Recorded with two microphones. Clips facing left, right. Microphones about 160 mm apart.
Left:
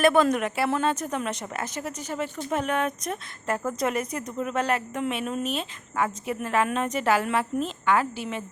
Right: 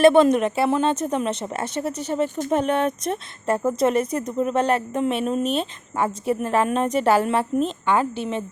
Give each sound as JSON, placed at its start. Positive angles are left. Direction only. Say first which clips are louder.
{"t": 0.0, "sound": "a woman's voice", "louder": "right 6 dB", "side_deg": -25}